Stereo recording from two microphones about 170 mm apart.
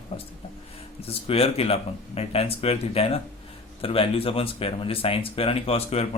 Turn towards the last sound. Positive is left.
turn(degrees=35)  # may be behind; listen again after turning